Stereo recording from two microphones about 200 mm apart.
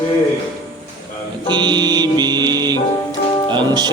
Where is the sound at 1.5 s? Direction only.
20° right (ahead or behind).